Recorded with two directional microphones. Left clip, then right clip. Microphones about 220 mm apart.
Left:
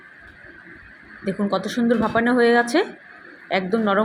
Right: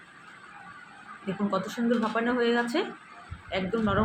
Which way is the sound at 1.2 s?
25° left (ahead or behind).